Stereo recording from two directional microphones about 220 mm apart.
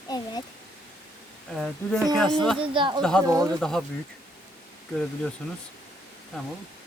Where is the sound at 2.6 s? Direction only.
25° right (ahead or behind).